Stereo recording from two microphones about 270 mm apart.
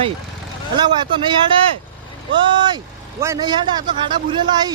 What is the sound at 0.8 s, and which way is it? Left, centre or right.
A man's voice, centre.